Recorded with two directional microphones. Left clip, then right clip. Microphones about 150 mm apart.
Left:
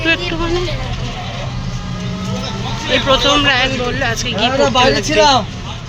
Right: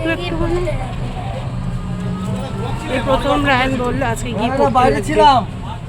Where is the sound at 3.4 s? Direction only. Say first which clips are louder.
Left 2 dB; 25° right (ahead or behind); by 5.2 s 5° right (ahead or behind).